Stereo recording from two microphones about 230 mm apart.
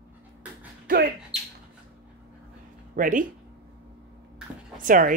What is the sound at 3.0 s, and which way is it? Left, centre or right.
Speech, right.